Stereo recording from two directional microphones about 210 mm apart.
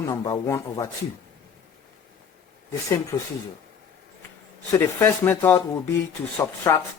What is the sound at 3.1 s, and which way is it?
Speech, 10° left (ahead or behind).